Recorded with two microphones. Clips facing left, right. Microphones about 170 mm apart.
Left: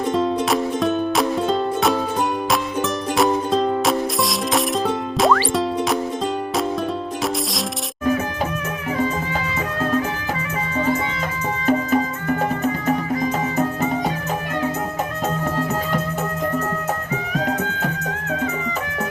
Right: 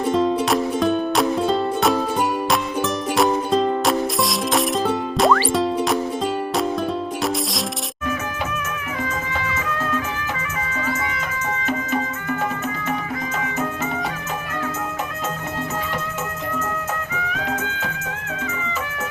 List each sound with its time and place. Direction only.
0.0 s music: centre (ahead or behind)
11.6 s music: 35° left (ahead or behind)
17.3 s music: 40° left (ahead or behind)